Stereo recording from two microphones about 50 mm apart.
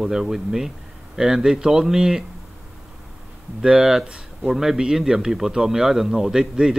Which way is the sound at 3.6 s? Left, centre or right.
Centre.